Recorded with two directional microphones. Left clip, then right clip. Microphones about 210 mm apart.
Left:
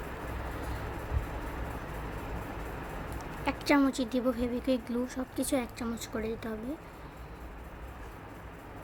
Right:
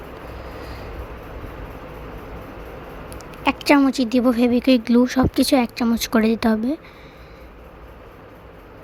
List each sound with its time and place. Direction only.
3.2 s speech: 30° right (ahead or behind)